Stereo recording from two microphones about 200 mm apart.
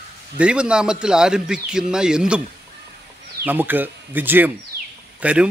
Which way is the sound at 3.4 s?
10° right (ahead or behind).